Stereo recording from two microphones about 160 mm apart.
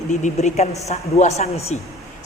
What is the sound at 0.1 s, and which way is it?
A man's voice, 50° left (ahead or behind).